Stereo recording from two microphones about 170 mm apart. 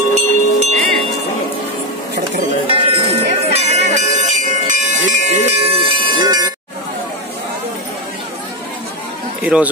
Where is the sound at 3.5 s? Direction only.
40° right (ahead or behind); by 6.5 s 25° right (ahead or behind).